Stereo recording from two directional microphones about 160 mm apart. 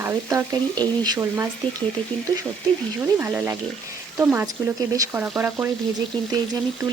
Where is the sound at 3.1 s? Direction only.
10° right (ahead or behind).